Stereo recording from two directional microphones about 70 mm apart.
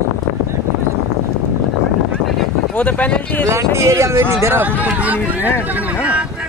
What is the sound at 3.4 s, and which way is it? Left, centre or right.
Speech, right.